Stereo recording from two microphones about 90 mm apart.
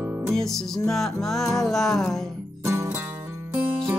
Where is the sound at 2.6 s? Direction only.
30° right (ahead or behind).